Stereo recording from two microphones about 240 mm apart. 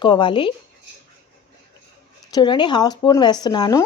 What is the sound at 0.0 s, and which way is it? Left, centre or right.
Speech, centre.